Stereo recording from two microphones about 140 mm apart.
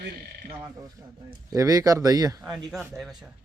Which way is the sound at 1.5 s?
25° right (ahead or behind).